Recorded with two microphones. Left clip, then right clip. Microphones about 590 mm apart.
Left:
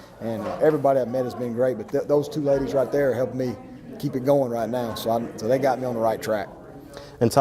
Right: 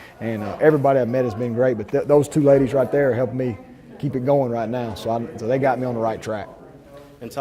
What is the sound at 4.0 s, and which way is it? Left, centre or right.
A man's voice, right.